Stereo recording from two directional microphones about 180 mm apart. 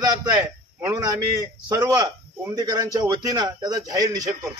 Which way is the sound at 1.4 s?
20° right (ahead or behind).